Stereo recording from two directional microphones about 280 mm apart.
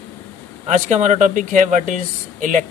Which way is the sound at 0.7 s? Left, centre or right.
Right.